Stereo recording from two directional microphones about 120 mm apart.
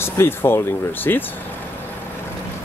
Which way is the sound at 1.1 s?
20° left (ahead or behind).